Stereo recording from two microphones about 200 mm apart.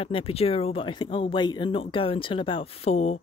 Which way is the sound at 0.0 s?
30° left (ahead or behind).